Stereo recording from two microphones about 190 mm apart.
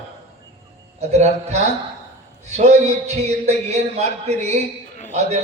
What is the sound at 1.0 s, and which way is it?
A man's voice, 35° right (ahead or behind).